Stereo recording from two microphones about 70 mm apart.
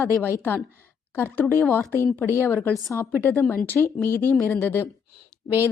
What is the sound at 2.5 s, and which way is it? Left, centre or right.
Speech, left.